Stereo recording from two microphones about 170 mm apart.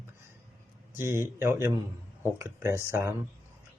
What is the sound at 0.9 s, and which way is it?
Speech, 15° right (ahead or behind).